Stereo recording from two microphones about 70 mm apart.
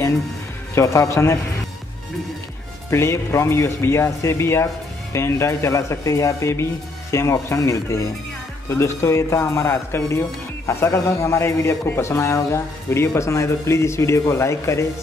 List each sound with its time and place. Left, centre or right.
0.7 s a man's voice: left
2.9 s a man's voice: left
8.6 s a man's voice: left